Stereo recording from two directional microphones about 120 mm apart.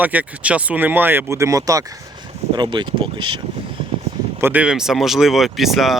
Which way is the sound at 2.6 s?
40° right (ahead or behind).